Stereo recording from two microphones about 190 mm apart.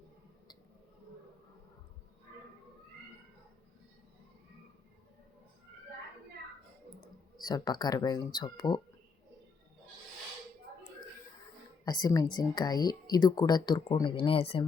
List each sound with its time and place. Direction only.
7.3 s speech: 20° left (ahead or behind)
11.9 s speech: 20° left (ahead or behind)